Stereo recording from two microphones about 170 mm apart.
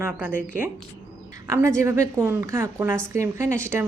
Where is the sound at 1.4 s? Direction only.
15° right (ahead or behind).